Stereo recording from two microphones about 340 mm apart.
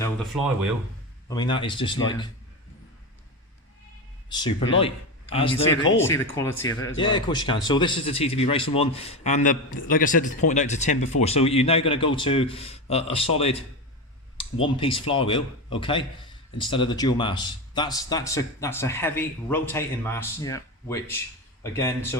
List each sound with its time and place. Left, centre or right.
0.0 s speech: centre
1.3 s speech: centre
4.3 s speech: centre